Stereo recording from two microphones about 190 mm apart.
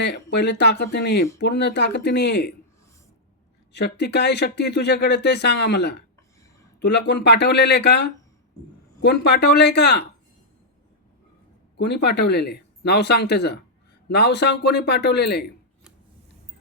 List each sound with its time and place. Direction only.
0.0 s speech: 65° left (ahead or behind)
3.7 s speech: 60° left (ahead or behind)
11.8 s speech: 65° left (ahead or behind)